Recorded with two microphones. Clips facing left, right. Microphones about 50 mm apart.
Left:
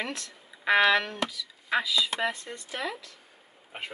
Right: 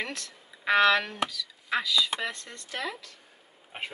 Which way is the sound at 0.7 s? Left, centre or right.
Centre.